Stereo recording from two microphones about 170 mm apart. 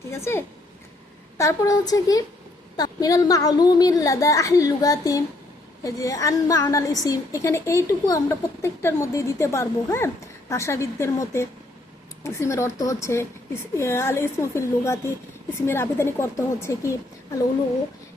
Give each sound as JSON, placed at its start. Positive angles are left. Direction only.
{"t": 0.1, "sound": "a woman's voice", "side_deg": 15}